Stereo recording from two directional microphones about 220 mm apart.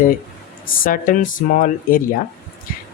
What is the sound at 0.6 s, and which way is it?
Speech, 40° left (ahead or behind).